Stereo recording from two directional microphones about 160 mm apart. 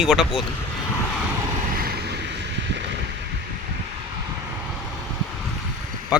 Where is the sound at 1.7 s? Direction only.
70° right (ahead or behind); by 2.8 s 90° right.